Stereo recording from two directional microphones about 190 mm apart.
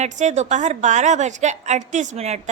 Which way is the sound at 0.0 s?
35° right (ahead or behind).